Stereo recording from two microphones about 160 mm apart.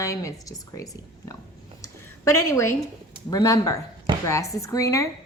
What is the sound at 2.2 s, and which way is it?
A woman's voice, 20° left (ahead or behind).